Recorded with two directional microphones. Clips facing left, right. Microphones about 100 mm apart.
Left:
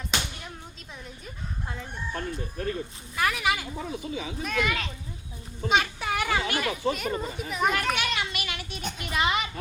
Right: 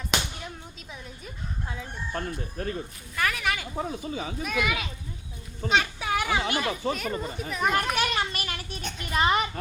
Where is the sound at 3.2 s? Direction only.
5° left (ahead or behind).